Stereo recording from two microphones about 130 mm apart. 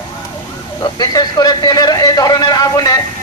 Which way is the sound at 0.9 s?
30° left (ahead or behind).